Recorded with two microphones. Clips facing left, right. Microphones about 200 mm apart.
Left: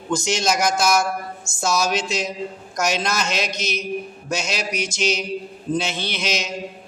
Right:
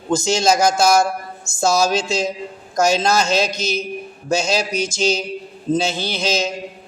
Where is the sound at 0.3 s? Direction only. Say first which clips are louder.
Right 5 dB; 30° right (ahead or behind).